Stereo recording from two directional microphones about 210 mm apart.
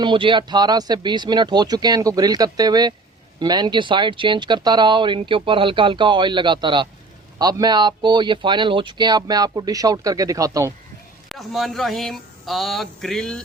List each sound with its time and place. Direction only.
0.0 s speech: 25° right (ahead or behind)
11.3 s speech: centre (ahead or behind)